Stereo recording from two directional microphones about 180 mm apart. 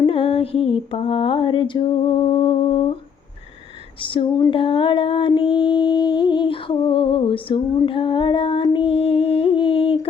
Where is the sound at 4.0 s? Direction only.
30° left (ahead or behind).